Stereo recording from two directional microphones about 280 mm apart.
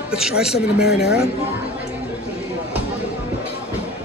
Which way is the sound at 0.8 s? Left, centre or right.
Left.